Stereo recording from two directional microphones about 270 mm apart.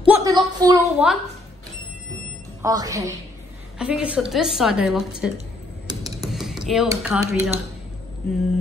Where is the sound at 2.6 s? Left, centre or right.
Centre.